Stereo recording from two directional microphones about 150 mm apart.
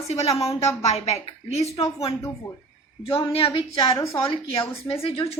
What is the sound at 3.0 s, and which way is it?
A woman's voice, 40° left (ahead or behind).